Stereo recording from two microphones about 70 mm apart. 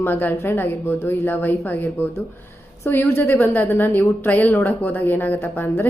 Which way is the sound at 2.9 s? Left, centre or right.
Left.